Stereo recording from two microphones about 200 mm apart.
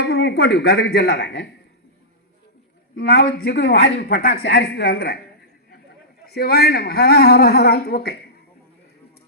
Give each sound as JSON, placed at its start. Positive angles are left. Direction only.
{"t": 0.0, "sound": "speech", "side_deg": 55}
{"t": 3.0, "sound": "a woman's voice", "side_deg": 55}
{"t": 6.2, "sound": "a woman's voice", "side_deg": 50}